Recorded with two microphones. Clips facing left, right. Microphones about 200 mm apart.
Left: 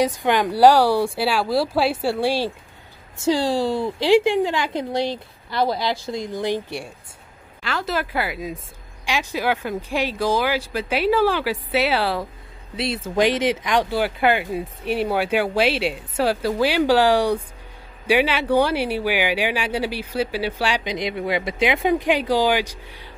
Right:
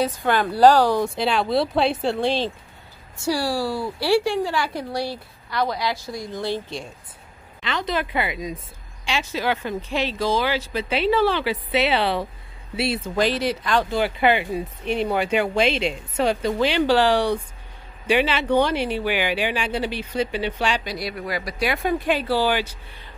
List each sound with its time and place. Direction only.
0.0 s speech: 15° left (ahead or behind)
3.2 s a woman's voice: 20° left (ahead or behind); by 13.1 s 5° right (ahead or behind)
13.1 s speech: 15° left (ahead or behind)
13.9 s speech: centre (ahead or behind)
20.8 s a woman's voice: 20° left (ahead or behind)